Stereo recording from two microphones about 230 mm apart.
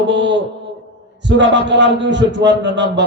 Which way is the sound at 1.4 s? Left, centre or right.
Right.